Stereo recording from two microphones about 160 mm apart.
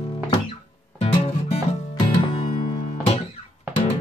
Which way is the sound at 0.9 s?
40° left (ahead or behind).